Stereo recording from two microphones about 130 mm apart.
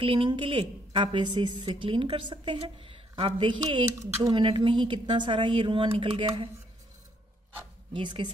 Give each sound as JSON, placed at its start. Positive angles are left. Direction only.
{"t": 0.0, "sound": "a woman's voice", "side_deg": -40}
{"t": 4.0, "sound": "speech", "side_deg": -25}
{"t": 4.3, "sound": "a woman's voice", "side_deg": -40}
{"t": 7.9, "sound": "a woman's voice", "side_deg": -35}